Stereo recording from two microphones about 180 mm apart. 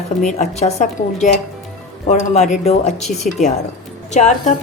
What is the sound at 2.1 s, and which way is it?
A woman's voice, 40° left (ahead or behind).